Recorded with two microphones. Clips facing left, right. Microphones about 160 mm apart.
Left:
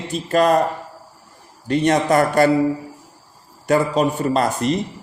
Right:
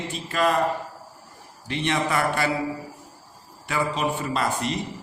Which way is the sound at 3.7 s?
40° left (ahead or behind).